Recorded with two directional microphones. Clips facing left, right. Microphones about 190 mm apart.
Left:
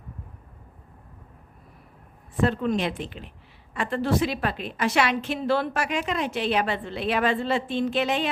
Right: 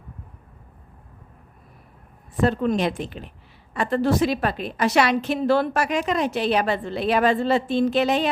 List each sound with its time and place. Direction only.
2.4 s a woman's voice: 40° right (ahead or behind)